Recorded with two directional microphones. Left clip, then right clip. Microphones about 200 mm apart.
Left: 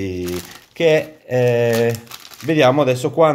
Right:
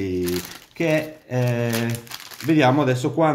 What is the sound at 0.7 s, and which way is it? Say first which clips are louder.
Speech: left 7 dB; 40° left (ahead or behind).